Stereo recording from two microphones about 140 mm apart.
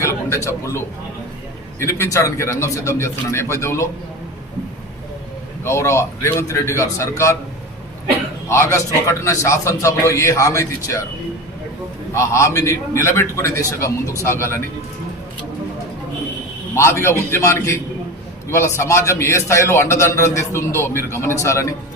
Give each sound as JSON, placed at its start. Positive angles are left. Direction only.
{"t": 0.0, "sound": "a sound", "side_deg": 20}
{"t": 1.8, "sound": "a man's voice", "side_deg": 20}
{"t": 5.6, "sound": "a man's voice", "side_deg": 20}
{"t": 8.4, "sound": "a man's voice", "side_deg": 20}
{"t": 12.1, "sound": "a man's voice", "side_deg": 20}
{"t": 16.7, "sound": "a man's voice", "side_deg": 20}